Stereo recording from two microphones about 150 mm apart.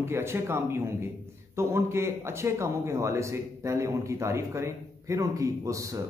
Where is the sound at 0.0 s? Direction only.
15° right (ahead or behind).